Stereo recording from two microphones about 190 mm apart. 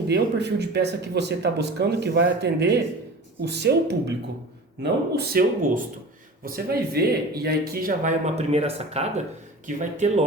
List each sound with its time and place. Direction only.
0.1 s speech: 60° right (ahead or behind); by 10.2 s 40° right (ahead or behind)